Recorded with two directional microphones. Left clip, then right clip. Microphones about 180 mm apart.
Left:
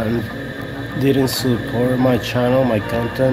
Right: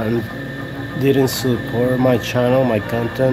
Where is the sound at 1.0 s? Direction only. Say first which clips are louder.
Right 1 dB; 25° right (ahead or behind).